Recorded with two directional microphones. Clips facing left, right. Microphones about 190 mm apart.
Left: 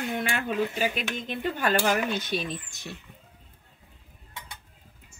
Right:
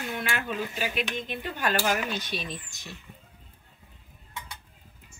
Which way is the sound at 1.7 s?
55° left (ahead or behind).